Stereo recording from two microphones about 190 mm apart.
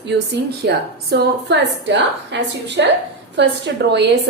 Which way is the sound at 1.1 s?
65° right (ahead or behind).